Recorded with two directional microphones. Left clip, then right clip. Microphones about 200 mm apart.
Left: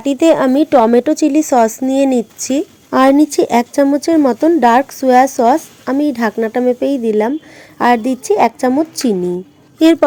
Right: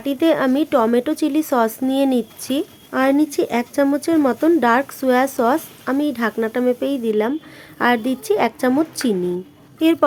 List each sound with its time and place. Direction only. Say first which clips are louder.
0.0 s speech: left 6 dB; 20° left (ahead or behind)
9.7 s speech: left 7 dB; 25° left (ahead or behind)